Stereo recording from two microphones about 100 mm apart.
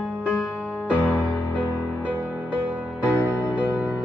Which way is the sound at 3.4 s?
15° left (ahead or behind).